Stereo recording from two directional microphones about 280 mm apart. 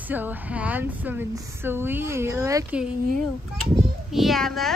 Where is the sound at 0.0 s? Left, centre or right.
Centre.